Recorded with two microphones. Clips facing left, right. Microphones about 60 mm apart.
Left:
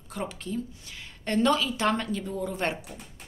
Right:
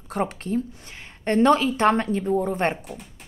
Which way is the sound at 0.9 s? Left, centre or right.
Right.